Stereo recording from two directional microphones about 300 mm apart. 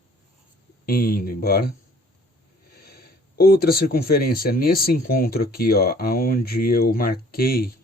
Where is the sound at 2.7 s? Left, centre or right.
Left.